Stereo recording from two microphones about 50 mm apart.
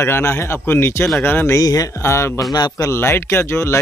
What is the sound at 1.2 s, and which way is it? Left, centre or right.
Speech, left.